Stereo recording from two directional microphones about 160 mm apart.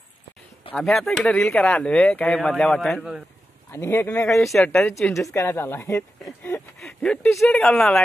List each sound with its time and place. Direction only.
0.7 s speech: centre (ahead or behind)
3.7 s speech: 15° left (ahead or behind)
4.4 s speech: centre (ahead or behind)
6.8 s a sound: 5° left (ahead or behind)
7.3 s speech: 5° left (ahead or behind)